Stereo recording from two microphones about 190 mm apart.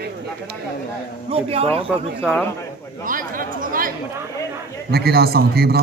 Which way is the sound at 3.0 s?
45° right (ahead or behind).